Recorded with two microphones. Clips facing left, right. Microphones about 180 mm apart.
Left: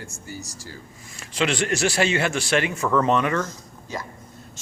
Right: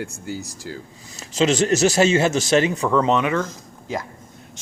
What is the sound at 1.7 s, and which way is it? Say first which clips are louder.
Speech: right 6 dB; 40° right (ahead or behind).